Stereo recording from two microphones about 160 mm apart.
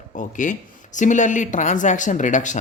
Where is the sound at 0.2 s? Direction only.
55° left (ahead or behind).